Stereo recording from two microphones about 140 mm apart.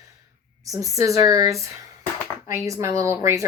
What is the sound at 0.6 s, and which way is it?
A woman's voice, 25° right (ahead or behind).